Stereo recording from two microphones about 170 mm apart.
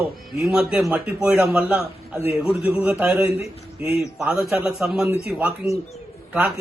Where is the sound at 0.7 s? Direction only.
5° right (ahead or behind).